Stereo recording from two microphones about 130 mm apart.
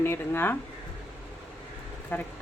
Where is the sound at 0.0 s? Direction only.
15° left (ahead or behind).